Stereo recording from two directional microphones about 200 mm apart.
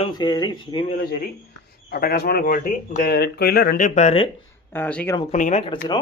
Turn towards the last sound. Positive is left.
turn(degrees=25)  # may be behind; listen again after turning